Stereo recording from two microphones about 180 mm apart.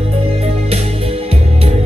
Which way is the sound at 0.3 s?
35° right (ahead or behind).